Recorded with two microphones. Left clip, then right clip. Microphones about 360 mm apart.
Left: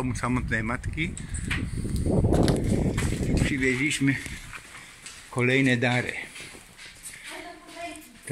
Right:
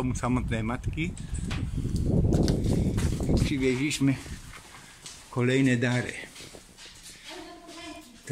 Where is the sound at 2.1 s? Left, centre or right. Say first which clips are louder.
Left 4 dB; left.